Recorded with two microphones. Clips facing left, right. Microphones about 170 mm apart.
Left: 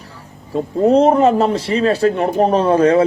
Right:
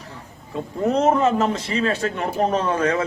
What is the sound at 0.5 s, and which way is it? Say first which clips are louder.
A man's voice: left 8 dB; 35° left (ahead or behind).